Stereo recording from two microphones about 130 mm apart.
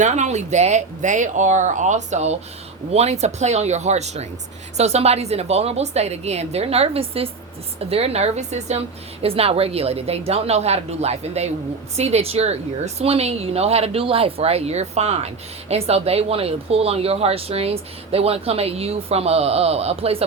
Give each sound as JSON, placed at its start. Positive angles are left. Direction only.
{"t": 0.0, "sound": "speech", "side_deg": -65}
{"t": 9.2, "sound": "speech", "side_deg": -50}